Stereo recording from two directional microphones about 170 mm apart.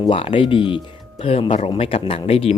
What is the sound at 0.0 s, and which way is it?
Speech, 30° left (ahead or behind).